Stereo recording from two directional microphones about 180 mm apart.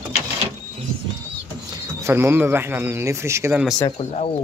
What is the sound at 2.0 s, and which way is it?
Speech, 10° right (ahead or behind).